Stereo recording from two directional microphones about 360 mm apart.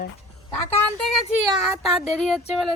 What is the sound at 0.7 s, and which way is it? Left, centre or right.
Speech, centre.